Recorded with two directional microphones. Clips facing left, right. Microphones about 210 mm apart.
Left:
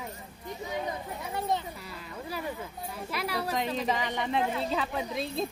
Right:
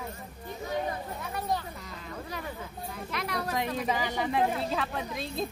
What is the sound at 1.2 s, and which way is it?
Speech, 25° left (ahead or behind).